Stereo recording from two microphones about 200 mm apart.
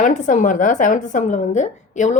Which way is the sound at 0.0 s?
40° left (ahead or behind).